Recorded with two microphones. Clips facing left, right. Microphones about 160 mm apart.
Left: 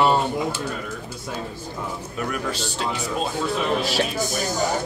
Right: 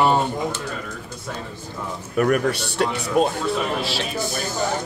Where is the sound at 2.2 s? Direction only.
60° right (ahead or behind).